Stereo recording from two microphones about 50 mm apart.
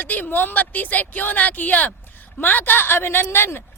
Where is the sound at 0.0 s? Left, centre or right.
Left.